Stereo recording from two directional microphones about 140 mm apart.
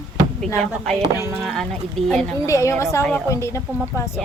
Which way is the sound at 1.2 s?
20° right (ahead or behind).